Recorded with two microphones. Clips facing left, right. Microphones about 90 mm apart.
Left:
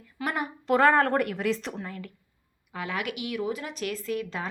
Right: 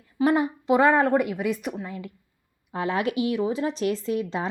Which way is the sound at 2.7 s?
30° right (ahead or behind).